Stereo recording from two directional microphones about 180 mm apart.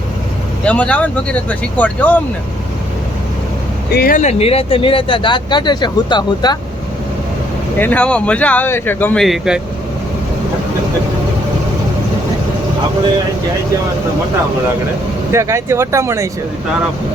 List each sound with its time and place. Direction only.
0.6 s speech: 5° left (ahead or behind)
3.9 s speech: 55° left (ahead or behind)
4.2 s speech: 35° left (ahead or behind)
7.8 s speech: 5° left (ahead or behind)
15.3 s speech: 15° right (ahead or behind)